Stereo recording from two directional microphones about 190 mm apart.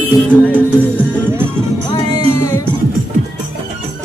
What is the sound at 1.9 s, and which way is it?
Music, 20° left (ahead or behind).